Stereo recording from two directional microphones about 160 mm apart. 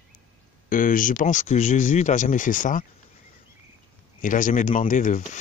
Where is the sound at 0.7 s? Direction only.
60° left (ahead or behind).